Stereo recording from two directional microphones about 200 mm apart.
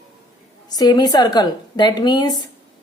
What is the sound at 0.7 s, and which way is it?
A woman's voice, 20° left (ahead or behind).